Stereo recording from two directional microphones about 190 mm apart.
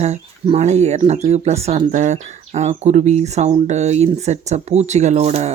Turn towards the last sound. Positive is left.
turn(degrees=-35)  # may be behind; listen again after turning